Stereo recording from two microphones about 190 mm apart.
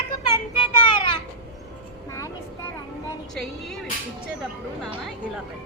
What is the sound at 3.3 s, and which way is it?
Speech, centre (ahead or behind).